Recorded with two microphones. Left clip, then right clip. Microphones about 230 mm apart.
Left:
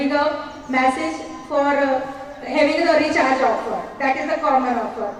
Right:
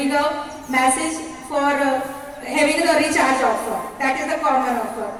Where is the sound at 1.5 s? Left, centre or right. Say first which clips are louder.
Left 1 dB; right.